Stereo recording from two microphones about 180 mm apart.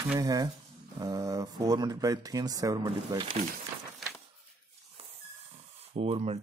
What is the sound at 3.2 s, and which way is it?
Speech, 45° right (ahead or behind).